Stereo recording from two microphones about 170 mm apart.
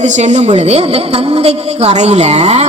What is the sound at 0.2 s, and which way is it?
A woman's voice, 45° right (ahead or behind).